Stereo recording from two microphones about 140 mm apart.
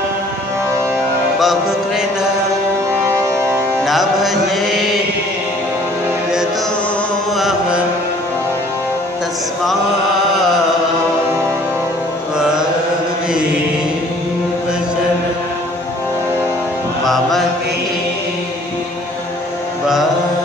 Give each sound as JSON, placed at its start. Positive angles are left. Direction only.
{"t": 1.4, "sound": "music", "side_deg": 0}
{"t": 3.1, "sound": "music", "side_deg": -20}
{"t": 3.8, "sound": "music", "side_deg": 0}
{"t": 7.3, "sound": "mantra", "side_deg": 0}
{"t": 12.4, "sound": "mantra", "side_deg": -5}
{"t": 17.0, "sound": "music", "side_deg": 0}